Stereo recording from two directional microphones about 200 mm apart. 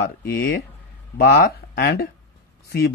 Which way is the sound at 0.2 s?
50° left (ahead or behind).